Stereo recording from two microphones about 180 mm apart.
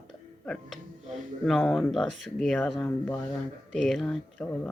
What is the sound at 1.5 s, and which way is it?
Speech, centre (ahead or behind).